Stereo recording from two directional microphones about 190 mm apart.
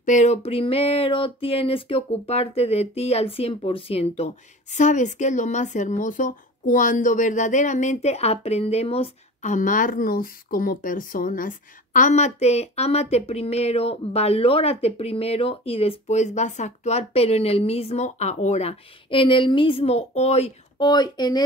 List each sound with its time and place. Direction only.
0.0 s speech: 40° left (ahead or behind)
20.8 s speech: 20° left (ahead or behind)